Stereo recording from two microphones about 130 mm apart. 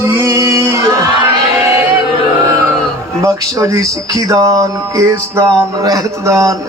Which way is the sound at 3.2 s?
25° right (ahead or behind).